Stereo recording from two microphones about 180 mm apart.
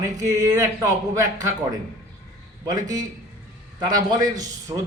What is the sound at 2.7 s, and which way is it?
A man's voice, 20° right (ahead or behind).